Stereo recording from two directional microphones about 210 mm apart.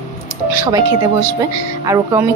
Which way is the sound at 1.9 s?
15° right (ahead or behind).